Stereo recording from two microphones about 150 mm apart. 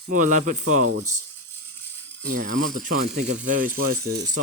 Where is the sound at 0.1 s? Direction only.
60° right (ahead or behind).